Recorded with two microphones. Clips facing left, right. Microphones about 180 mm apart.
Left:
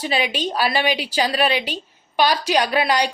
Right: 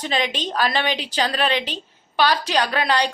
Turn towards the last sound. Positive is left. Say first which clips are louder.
# left 2 dB
turn(degrees=10)  # may be behind; listen again after turning